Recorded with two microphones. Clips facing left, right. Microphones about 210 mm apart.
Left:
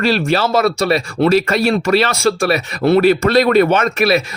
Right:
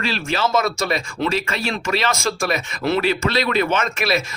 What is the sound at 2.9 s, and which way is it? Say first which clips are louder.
Speech: left 9 dB; 55° left (ahead or behind).